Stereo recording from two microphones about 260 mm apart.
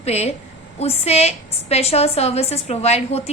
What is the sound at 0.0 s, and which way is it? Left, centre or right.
A woman's voice, left.